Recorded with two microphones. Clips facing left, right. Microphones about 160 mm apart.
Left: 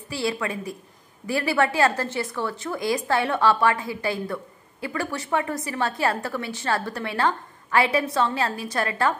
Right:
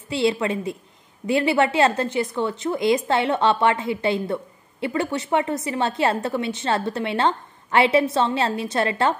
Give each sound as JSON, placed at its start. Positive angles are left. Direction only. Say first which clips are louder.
{"t": 0.1, "sound": "a woman's voice", "louder": "right 6 dB", "side_deg": -25}